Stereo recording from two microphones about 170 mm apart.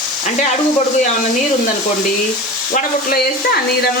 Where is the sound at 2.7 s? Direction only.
55° left (ahead or behind).